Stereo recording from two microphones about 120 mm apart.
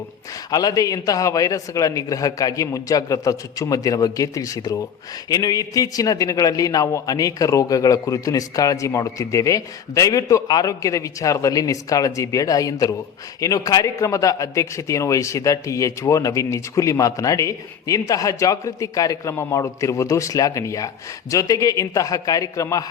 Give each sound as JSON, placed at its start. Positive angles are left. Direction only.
{"t": 0.5, "sound": "a man's voice", "side_deg": 30}